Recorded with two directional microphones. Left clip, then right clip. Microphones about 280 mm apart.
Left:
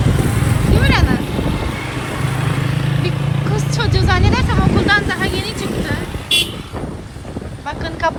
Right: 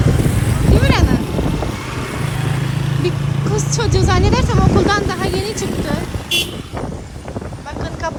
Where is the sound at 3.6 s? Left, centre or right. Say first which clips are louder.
Even; centre.